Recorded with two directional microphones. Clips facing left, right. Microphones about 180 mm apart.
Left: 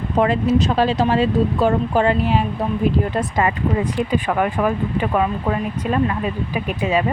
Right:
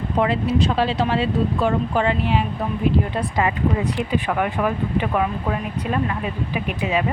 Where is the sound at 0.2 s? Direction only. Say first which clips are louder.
Left 3 dB; 45° left (ahead or behind).